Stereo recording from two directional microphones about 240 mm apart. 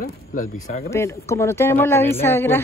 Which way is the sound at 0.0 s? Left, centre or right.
Left.